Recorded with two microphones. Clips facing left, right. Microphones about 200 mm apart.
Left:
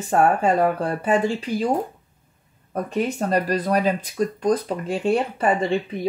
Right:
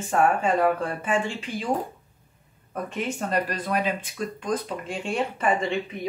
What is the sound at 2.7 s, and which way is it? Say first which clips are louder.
Speech: left 6 dB; 40° left (ahead or behind).